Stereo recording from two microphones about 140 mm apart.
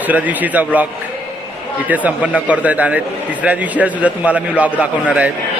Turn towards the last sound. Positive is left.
turn(degrees=-10)  # may be behind; listen again after turning